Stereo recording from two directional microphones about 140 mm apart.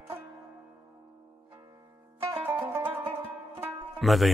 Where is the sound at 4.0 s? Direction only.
Centre (ahead or behind).